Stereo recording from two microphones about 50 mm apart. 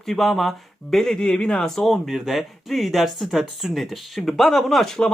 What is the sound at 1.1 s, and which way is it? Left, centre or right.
Speech, centre.